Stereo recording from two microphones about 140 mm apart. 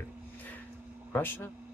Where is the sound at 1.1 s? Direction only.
15° left (ahead or behind).